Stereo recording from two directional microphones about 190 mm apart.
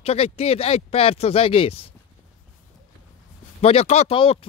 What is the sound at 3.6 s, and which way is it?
Speech, 35° left (ahead or behind).